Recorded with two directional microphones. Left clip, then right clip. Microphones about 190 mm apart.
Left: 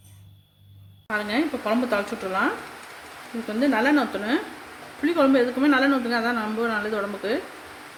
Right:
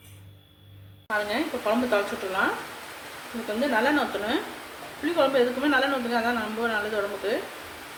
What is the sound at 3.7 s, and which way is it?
A woman's voice, 55° left (ahead or behind).